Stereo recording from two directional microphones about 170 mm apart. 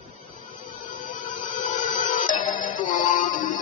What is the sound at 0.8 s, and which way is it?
Music, 50° left (ahead or behind).